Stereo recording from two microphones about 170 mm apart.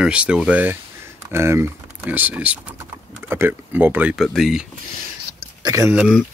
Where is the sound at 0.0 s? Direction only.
5° right (ahead or behind).